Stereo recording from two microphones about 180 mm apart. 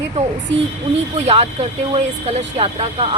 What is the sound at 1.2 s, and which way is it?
Speech, 35° right (ahead or behind).